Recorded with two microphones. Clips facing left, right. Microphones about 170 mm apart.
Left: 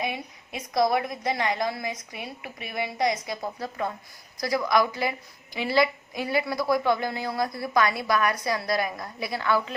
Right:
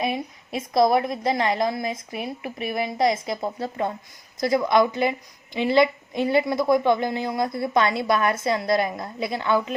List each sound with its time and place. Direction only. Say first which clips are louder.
0.5 s a woman's voice: right 4 dB; 25° right (ahead or behind)